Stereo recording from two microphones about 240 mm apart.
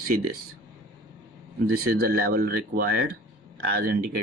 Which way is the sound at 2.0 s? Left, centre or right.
Right.